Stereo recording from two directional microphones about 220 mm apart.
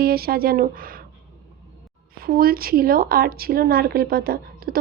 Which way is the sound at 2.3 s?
40° right (ahead or behind).